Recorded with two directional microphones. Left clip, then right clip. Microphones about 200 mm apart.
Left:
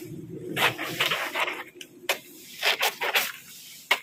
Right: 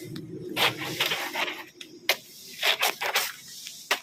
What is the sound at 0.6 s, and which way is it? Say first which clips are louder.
Printer: left 1 dB; 45° right (ahead or behind).